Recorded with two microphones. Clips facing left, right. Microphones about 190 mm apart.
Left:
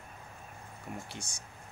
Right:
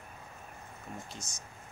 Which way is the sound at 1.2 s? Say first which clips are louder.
Left 1 dB; 30° left (ahead or behind).